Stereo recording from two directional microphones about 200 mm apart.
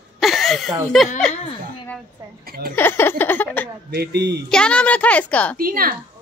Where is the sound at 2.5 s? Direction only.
50° right (ahead or behind).